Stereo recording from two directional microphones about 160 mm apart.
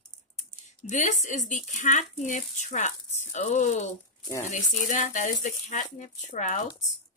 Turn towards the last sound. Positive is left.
turn(degrees=50)  # may be behind; listen again after turning